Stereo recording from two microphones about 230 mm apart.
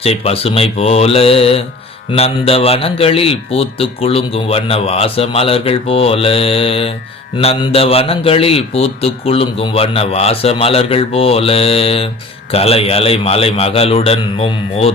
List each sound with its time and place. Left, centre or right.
0.0 s speech: left